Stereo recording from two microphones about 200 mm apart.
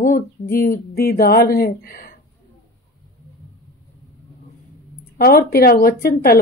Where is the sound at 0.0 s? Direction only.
45° left (ahead or behind).